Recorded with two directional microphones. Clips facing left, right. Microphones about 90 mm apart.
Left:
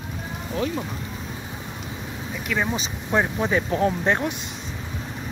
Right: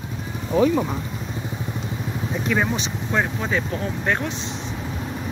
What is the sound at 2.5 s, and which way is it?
Speech, 15° right (ahead or behind).